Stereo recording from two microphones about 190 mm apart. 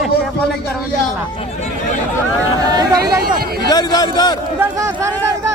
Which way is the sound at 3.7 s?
20° left (ahead or behind).